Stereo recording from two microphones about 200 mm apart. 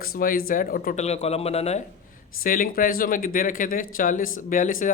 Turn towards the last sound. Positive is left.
turn(degrees=40)  # may be behind; listen again after turning